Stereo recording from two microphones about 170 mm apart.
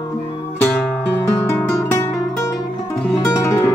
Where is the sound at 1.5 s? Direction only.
15° left (ahead or behind).